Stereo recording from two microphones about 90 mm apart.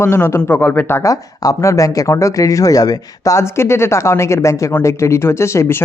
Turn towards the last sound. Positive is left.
turn(degrees=30)  # may be behind; listen again after turning